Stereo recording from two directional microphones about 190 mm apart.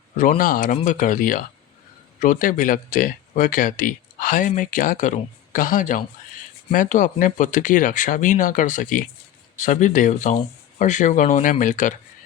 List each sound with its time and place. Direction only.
0.1 s speech: 45° left (ahead or behind)